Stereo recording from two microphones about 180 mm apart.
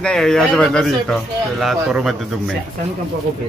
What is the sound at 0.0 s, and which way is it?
Speech, 5° left (ahead or behind).